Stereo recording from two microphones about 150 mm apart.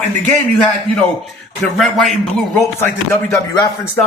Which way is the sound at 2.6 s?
15° left (ahead or behind).